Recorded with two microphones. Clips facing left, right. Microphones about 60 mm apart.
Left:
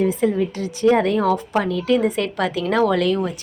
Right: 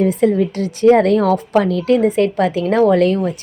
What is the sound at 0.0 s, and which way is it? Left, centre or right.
A woman's voice, right.